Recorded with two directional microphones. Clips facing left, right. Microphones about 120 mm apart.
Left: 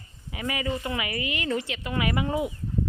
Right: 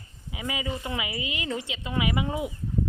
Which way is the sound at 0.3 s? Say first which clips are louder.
Left 3 dB; 15° right (ahead or behind).